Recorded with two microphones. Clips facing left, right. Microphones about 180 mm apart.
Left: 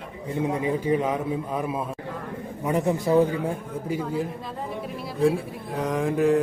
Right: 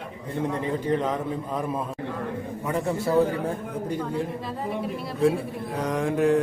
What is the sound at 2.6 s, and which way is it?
Speech, 20° left (ahead or behind).